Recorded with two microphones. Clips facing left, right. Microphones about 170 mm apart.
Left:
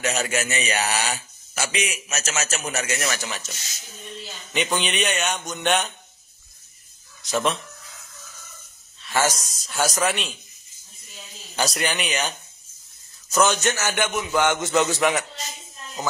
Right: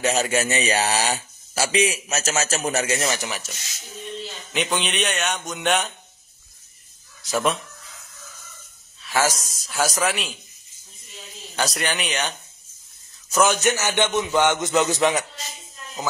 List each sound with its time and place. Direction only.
0.0 s speech: 30° right (ahead or behind)
3.2 s speech: 10° right (ahead or behind)
4.2 s a man's voice: centre (ahead or behind)
7.2 s a man's voice: 5° right (ahead or behind)
9.0 s a man's voice: centre (ahead or behind)
13.6 s a man's voice: 15° right (ahead or behind)